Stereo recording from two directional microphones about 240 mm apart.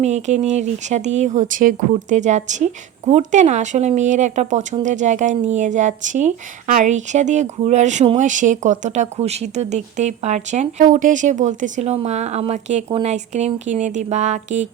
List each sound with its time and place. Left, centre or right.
0.0 s speech: right